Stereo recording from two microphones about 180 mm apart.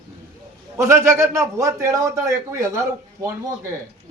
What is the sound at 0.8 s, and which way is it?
A man's voice, 15° right (ahead or behind).